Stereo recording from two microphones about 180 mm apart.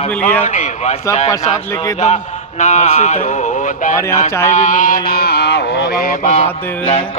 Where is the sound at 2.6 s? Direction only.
40° left (ahead or behind).